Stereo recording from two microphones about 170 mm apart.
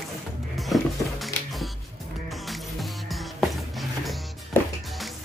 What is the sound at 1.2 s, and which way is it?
Music, centre (ahead or behind).